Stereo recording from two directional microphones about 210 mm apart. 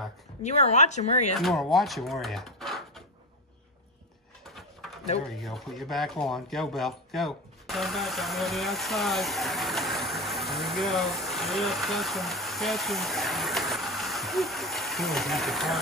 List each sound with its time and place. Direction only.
0.4 s speech: 30° left (ahead or behind)
1.4 s speech: centre (ahead or behind)
5.4 s speech: centre (ahead or behind)